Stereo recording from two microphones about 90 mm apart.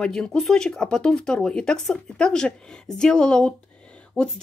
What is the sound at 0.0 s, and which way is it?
Speech, 5° left (ahead or behind).